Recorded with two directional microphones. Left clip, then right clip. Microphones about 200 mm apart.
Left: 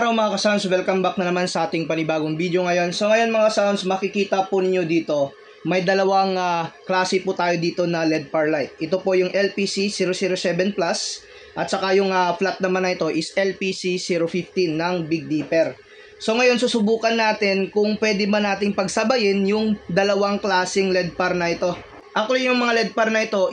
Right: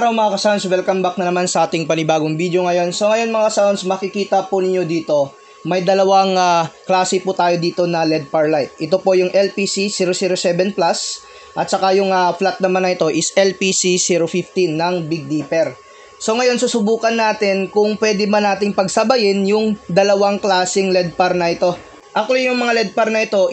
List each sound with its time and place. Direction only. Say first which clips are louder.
0.0 s speech: right 5 dB; 20° right (ahead or behind)